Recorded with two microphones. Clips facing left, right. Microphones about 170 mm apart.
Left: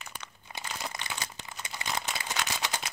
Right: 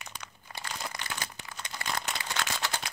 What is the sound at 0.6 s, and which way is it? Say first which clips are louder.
Crumpling: even; 20° left (ahead or behind).